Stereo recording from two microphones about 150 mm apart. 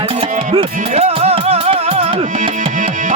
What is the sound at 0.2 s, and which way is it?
Music, 40° right (ahead or behind).